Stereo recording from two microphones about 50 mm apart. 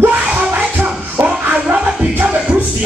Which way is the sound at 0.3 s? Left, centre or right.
Right.